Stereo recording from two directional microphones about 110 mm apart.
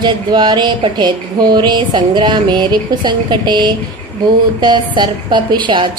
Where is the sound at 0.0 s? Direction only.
40° right (ahead or behind).